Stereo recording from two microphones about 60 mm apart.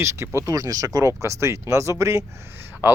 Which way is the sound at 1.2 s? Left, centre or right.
Right.